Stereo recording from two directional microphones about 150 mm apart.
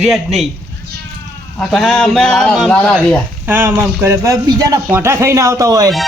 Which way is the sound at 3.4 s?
15° right (ahead or behind).